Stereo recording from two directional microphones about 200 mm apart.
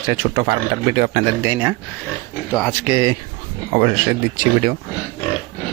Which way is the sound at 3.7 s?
35° right (ahead or behind).